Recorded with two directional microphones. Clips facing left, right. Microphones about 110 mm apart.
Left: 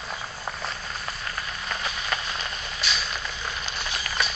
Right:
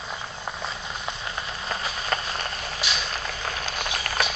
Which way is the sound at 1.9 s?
35° right (ahead or behind).